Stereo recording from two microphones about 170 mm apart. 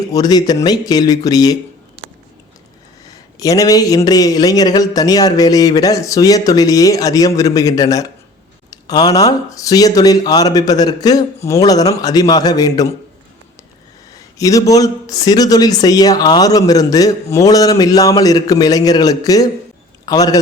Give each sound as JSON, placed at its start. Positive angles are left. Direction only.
{"t": 0.1, "sound": "a man's voice", "side_deg": 25}
{"t": 3.1, "sound": "a man's voice", "side_deg": 20}
{"t": 14.2, "sound": "a sound", "side_deg": 20}
{"t": 14.7, "sound": "a man's voice", "side_deg": 20}